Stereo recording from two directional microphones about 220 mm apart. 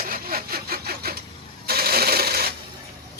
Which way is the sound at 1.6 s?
45° right (ahead or behind).